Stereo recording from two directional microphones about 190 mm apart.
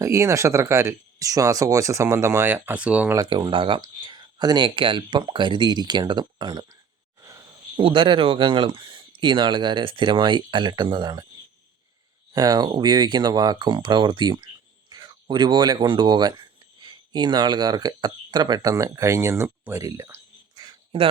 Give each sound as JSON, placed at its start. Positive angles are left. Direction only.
{"t": 0.0, "sound": "speech", "side_deg": -15}
{"t": 3.2, "sound": "speech", "side_deg": -20}
{"t": 7.2, "sound": "a sound", "side_deg": -20}
{"t": 7.9, "sound": "speech", "side_deg": -25}
{"t": 12.3, "sound": "speech", "side_deg": -20}
{"t": 20.6, "sound": "a sound", "side_deg": -25}